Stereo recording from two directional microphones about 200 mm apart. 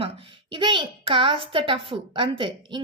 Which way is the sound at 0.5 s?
25° right (ahead or behind).